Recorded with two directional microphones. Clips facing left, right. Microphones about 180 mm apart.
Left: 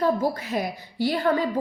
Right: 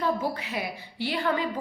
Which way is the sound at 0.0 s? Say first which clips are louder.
Left 5 dB; 40° left (ahead or behind).